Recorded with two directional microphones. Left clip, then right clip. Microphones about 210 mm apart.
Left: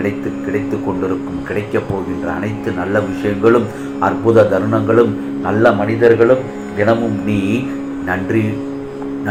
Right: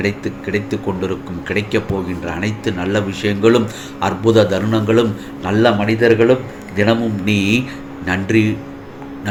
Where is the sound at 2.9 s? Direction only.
60° right (ahead or behind).